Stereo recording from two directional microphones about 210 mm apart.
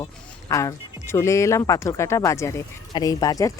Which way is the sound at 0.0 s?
15° left (ahead or behind).